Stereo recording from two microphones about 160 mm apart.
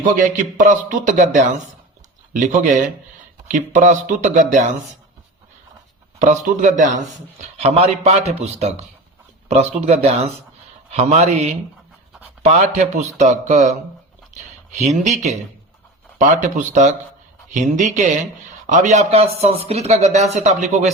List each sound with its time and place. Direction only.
0.0 s speech: 55° right (ahead or behind)
6.1 s speech: 50° right (ahead or behind)
7.6 s a man's voice: 40° right (ahead or behind)